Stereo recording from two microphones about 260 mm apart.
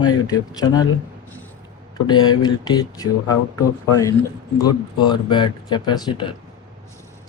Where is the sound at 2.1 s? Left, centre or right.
Centre.